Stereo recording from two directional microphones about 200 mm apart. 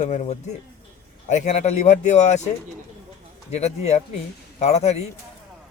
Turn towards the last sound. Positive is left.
turn(degrees=35)  # may be behind; listen again after turning